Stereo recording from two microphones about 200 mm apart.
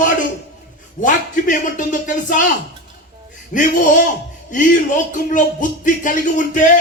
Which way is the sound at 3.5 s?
40° left (ahead or behind).